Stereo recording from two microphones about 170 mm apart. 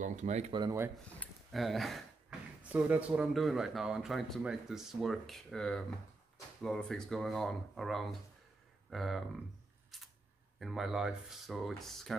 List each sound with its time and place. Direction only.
0.0 s speech: 45° right (ahead or behind)
0.5 s speech: 25° right (ahead or behind)
1.2 s speech: centre (ahead or behind)
10.6 s speech: centre (ahead or behind)